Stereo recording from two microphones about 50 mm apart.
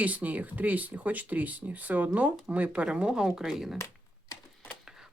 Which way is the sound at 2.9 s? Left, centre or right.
Centre.